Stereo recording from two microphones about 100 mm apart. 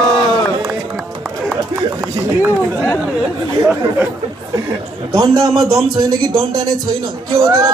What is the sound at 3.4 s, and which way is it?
A man's voice, 35° right (ahead or behind).